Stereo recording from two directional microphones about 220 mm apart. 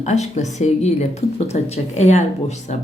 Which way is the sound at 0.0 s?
30° left (ahead or behind).